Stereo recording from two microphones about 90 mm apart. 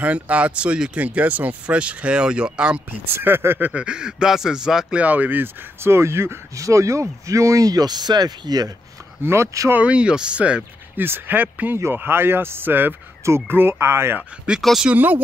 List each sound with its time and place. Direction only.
0.0 s speech: 15° right (ahead or behind)
3.1 s speech: 25° right (ahead or behind); by 8.7 s 45° right (ahead or behind)
9.2 s speech: 30° right (ahead or behind)
9.7 s speech: 15° right (ahead or behind)
14.6 s speech: centre (ahead or behind)
14.9 s speech: 20° right (ahead or behind)